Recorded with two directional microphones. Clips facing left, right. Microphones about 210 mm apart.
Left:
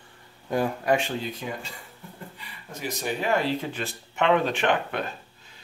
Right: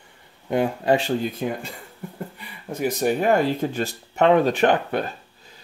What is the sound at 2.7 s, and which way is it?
Speech, 55° right (ahead or behind).